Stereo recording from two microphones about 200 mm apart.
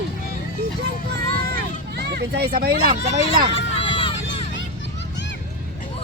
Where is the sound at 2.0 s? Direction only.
55° right (ahead or behind).